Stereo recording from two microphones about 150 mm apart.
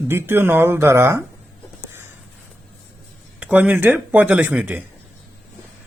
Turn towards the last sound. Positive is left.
turn(degrees=-10)  # may be behind; listen again after turning